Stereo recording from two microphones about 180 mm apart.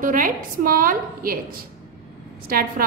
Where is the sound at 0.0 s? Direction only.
50° right (ahead or behind).